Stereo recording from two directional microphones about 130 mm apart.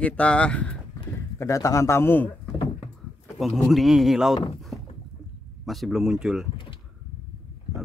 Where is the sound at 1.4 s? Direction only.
25° left (ahead or behind).